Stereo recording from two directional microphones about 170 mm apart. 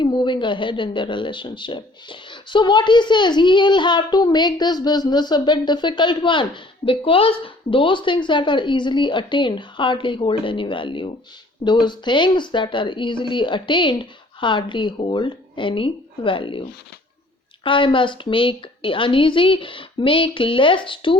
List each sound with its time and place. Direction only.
0.0 s speech: 25° left (ahead or behind)